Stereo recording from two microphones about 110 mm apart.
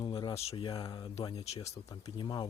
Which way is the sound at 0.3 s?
65° left (ahead or behind).